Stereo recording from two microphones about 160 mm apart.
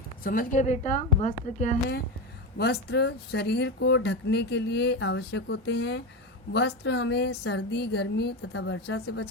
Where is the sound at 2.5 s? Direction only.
90° left.